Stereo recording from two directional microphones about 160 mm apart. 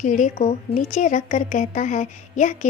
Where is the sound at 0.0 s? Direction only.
50° left (ahead or behind).